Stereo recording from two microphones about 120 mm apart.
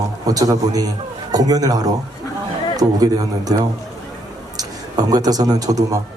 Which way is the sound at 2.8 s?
30° right (ahead or behind).